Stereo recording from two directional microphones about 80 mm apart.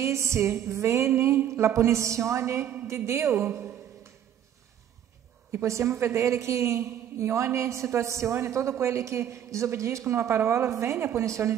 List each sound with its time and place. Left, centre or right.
0.0 s a woman's voice: right
5.5 s a woman's voice: right